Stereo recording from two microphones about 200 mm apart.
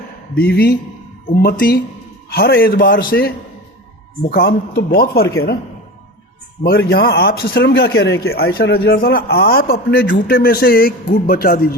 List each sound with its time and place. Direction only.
0.3 s speech: 50° left (ahead or behind)
6.6 s speech: 50° left (ahead or behind)